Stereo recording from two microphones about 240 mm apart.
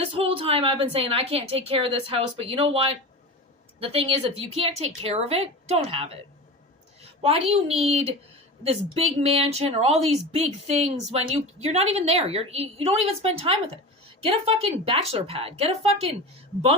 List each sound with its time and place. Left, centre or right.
0.0 s a woman's voice: right